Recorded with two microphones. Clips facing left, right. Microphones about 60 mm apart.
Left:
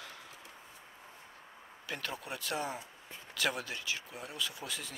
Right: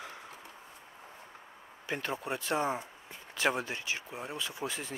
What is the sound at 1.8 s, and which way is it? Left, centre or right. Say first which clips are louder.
Speech: right 5 dB; right.